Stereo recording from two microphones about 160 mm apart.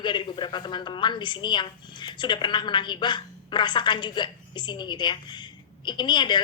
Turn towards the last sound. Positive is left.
turn(degrees=30)  # may be behind; listen again after turning